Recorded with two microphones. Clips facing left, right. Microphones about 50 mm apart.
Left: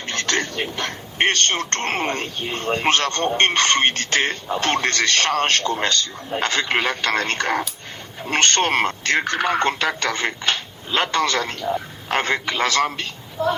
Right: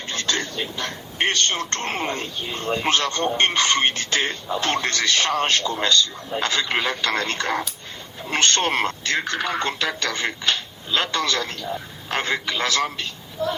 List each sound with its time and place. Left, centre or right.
0.0 s a man's voice: left
4.2 s a man's voice: left
9.0 s speech: left